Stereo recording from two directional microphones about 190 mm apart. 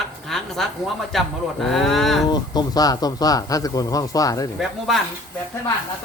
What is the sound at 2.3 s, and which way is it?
Speech, 20° left (ahead or behind).